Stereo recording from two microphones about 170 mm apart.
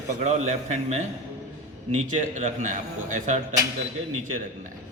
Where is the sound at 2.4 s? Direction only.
45° right (ahead or behind).